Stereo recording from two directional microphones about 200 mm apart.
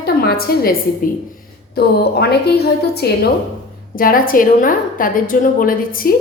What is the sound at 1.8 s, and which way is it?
A woman's voice, 55° left (ahead or behind).